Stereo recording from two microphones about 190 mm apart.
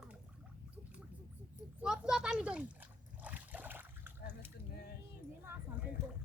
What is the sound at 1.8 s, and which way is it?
Speech, 5° right (ahead or behind).